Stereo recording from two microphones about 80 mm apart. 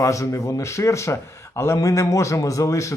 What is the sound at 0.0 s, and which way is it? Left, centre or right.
Speech, left.